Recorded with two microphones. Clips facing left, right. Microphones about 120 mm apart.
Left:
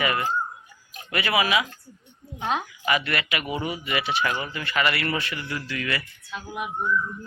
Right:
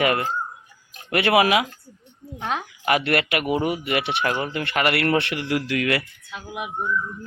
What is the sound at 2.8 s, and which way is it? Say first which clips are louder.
Speech: right 6 dB; 65° right (ahead or behind).